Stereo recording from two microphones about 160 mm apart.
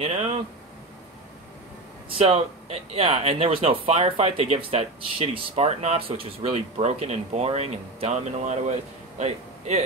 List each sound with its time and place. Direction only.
0.0 s speech: 40° right (ahead or behind)
2.0 s a man's voice: 35° right (ahead or behind)